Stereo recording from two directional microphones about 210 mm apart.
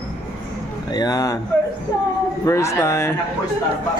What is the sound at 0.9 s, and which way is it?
Speech, 20° left (ahead or behind).